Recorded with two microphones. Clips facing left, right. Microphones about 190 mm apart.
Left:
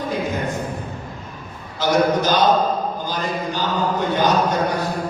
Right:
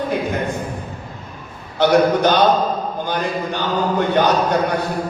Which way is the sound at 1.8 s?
60° right (ahead or behind).